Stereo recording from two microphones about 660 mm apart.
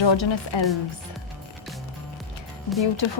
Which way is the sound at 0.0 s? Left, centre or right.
Left.